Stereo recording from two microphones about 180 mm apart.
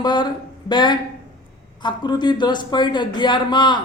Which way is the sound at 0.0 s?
25° left (ahead or behind).